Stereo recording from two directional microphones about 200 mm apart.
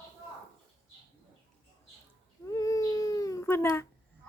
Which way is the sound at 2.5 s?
15° left (ahead or behind).